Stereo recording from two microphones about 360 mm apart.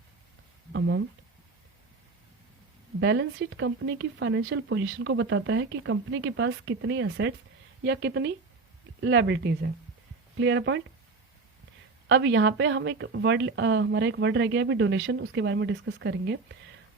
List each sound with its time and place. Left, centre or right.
0.7 s speech: right
3.0 s speech: right
12.0 s speech: right